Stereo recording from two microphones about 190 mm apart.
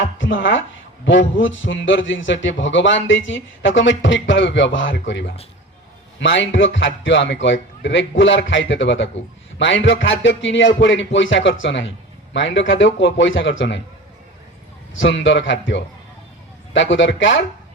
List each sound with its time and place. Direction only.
0.0 s a sound: 75° left (ahead or behind)
1.0 s a man's voice: 75° left (ahead or behind)
14.9 s a man's voice: 75° left (ahead or behind)